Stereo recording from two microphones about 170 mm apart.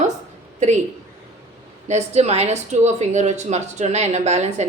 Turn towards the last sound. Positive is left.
turn(degrees=-40)  # may be behind; listen again after turning